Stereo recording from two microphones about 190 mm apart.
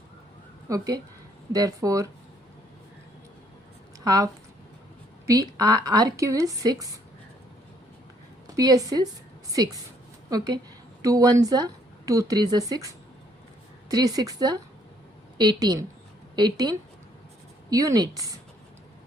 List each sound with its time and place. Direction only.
0.7 s a woman's voice: 20° right (ahead or behind)
4.0 s a woman's voice: 20° right (ahead or behind)
8.5 s a woman's voice: 20° right (ahead or behind)
10.2 s a woman's voice: 20° right (ahead or behind)